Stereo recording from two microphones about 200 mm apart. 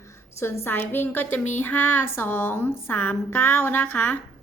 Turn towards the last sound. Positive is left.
turn(degrees=10)  # may be behind; listen again after turning